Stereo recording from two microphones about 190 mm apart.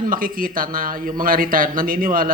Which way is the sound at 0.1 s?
50° right (ahead or behind).